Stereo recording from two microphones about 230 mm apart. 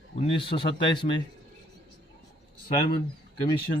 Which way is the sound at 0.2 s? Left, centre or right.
Left.